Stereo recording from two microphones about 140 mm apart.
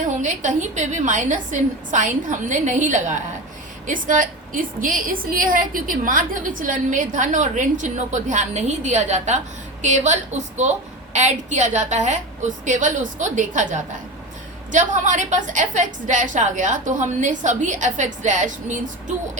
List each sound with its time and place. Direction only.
0.2 s a woman's voice: 60° right (ahead or behind)